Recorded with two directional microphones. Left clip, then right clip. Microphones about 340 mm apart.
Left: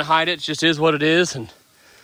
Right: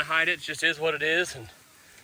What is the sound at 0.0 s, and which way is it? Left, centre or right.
Speech, centre.